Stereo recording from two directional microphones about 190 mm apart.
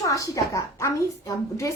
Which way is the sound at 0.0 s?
15° left (ahead or behind).